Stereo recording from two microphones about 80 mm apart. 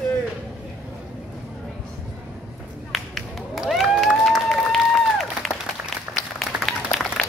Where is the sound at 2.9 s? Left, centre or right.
Centre.